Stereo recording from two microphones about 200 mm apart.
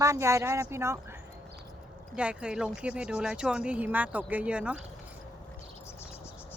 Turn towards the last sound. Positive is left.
turn(degrees=-5)  # may be behind; listen again after turning